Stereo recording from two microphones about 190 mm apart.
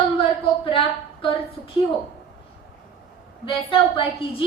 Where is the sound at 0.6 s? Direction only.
25° left (ahead or behind).